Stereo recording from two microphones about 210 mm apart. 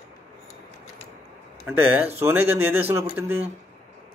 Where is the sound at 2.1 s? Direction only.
10° right (ahead or behind).